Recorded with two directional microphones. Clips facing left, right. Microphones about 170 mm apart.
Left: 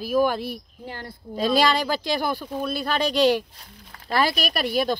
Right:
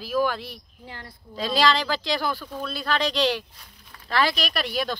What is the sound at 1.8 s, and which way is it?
Speech, 15° left (ahead or behind).